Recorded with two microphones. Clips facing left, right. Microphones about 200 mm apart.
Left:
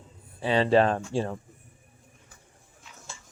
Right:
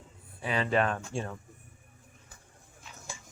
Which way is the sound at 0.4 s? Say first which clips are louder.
Left 7 dB; 30° left (ahead or behind).